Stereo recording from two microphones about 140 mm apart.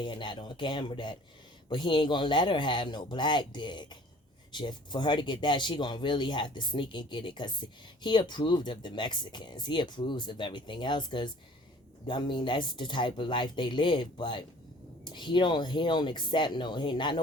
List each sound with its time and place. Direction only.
0.0 s speech: 35° left (ahead or behind)